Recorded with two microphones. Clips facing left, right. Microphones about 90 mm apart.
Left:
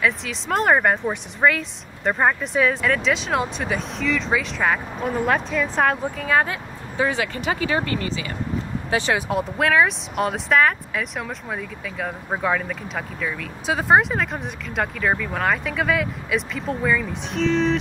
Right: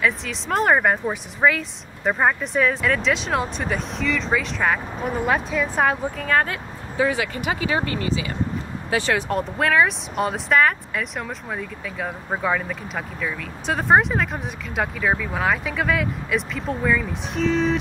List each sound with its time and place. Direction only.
0.0 s speech: centre (ahead or behind)
8.9 s speech: 20° left (ahead or behind)
9.3 s speech: centre (ahead or behind)